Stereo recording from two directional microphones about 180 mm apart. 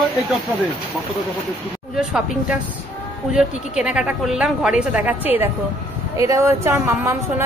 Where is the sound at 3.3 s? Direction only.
5° right (ahead or behind).